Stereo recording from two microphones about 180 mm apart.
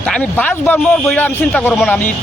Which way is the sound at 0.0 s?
5° left (ahead or behind).